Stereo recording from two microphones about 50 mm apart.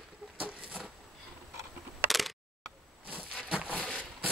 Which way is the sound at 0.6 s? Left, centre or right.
Right.